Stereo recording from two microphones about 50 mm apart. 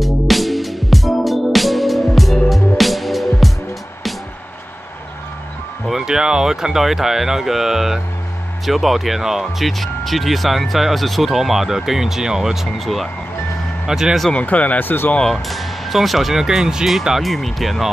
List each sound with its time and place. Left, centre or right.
0.0 s music: centre
5.9 s speech: centre
12.7 s speech: centre
13.8 s speech: centre
14.3 s speech: left
15.4 s speech: centre